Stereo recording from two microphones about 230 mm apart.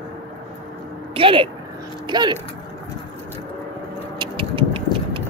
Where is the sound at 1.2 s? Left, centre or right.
Right.